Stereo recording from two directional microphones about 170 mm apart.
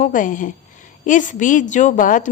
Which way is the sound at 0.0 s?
50° left (ahead or behind).